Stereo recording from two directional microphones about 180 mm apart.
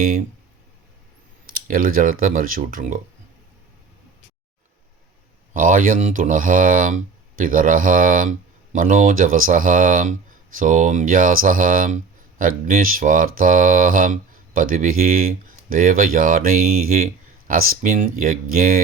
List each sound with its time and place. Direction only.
0.0 s speech: 50° right (ahead or behind)
1.5 s speech: 50° right (ahead or behind)
5.5 s speech: 50° right (ahead or behind)